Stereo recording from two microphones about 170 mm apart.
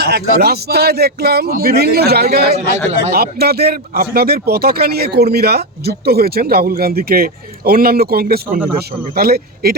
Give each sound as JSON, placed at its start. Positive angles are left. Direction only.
{"t": 0.0, "sound": "speech", "side_deg": -65}